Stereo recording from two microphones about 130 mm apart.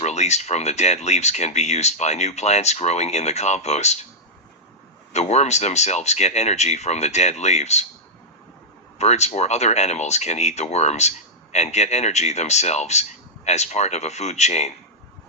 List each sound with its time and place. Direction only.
0.0 s speech: 60° left (ahead or behind)
5.1 s speech: 60° left (ahead or behind)
9.0 s speech: 60° left (ahead or behind)